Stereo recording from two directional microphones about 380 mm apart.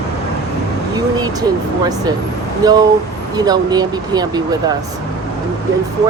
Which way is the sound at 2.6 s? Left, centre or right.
Centre.